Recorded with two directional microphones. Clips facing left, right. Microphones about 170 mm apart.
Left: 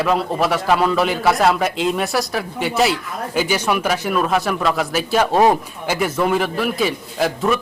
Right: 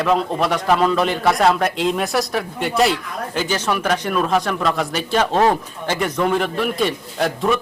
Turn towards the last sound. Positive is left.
turn(degrees=0)  # may be behind; listen again after turning